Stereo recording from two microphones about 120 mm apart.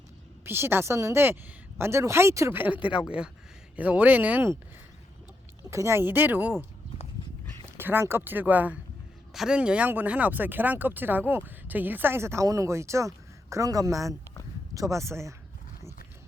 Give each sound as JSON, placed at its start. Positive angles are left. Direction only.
{"t": 0.4, "sound": "a woman's voice", "side_deg": -20}
{"t": 5.7, "sound": "speech", "side_deg": -20}
{"t": 7.8, "sound": "a woman's voice", "side_deg": -20}